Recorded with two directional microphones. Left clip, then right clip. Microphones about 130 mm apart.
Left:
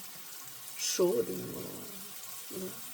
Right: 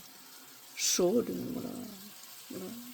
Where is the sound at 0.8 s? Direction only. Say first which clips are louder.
Right 3 dB; 90° right.